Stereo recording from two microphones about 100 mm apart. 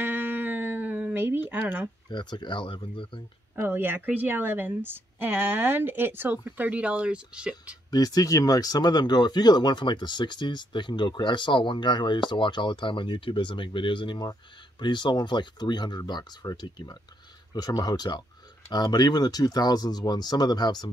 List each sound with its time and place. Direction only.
0.0 s music: 20° right (ahead or behind)
1.5 s speech: 20° right (ahead or behind)
2.0 s speech: 50° left (ahead or behind)
3.5 s speech: 20° right (ahead or behind)
7.9 s speech: 40° left (ahead or behind)